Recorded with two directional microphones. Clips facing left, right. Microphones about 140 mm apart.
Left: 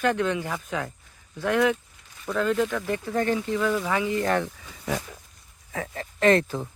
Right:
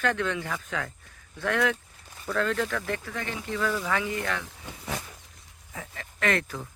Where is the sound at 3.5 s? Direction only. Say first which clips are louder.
Left 4 dB; 15° left (ahead or behind).